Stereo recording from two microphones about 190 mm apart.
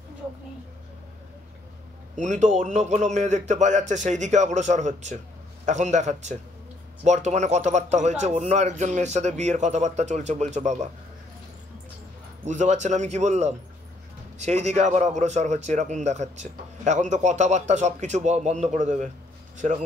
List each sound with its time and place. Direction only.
2.1 s speech: 40° right (ahead or behind)
12.4 s speech: 40° right (ahead or behind)